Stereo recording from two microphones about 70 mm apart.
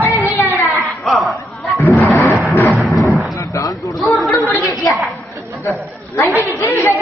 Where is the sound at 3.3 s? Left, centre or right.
Left.